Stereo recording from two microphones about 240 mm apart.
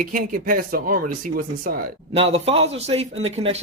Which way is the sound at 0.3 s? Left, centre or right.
Right.